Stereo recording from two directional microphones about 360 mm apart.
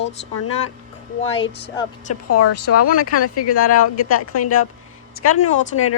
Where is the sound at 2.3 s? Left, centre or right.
Left.